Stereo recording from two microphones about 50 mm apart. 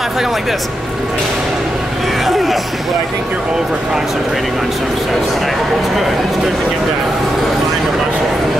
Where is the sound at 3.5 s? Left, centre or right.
Centre.